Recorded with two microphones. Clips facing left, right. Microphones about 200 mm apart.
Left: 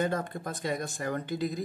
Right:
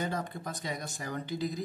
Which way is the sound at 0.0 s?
55° left (ahead or behind).